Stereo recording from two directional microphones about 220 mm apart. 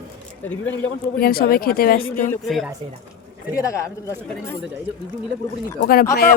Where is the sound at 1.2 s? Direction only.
40° left (ahead or behind).